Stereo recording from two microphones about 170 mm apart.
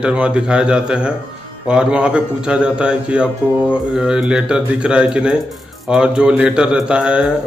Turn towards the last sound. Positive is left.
turn(degrees=-5)  # may be behind; listen again after turning